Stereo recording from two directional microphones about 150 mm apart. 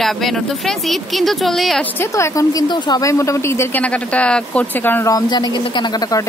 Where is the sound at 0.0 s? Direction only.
Centre (ahead or behind).